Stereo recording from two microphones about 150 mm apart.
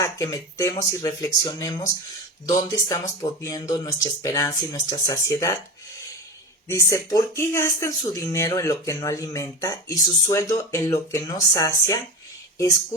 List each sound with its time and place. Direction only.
0.0 s speech: 20° left (ahead or behind)
6.7 s speech: 20° left (ahead or behind)